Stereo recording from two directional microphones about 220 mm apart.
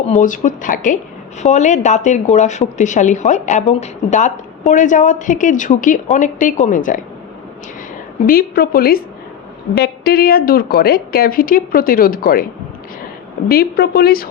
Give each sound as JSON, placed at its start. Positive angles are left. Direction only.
{"t": 0.0, "sound": "a woman's voice", "side_deg": 35}
{"t": 8.3, "sound": "a woman's voice", "side_deg": 45}
{"t": 13.5, "sound": "a woman's voice", "side_deg": 45}